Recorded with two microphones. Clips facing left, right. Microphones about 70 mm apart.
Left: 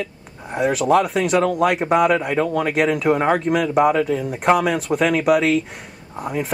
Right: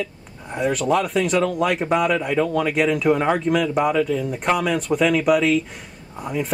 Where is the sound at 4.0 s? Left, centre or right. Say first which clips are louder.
Left 1 dB; centre.